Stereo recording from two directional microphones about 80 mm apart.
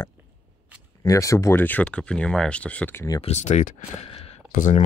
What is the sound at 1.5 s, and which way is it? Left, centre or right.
Speech, left.